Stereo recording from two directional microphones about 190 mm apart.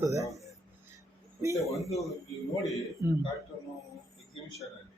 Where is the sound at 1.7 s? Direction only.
Centre (ahead or behind).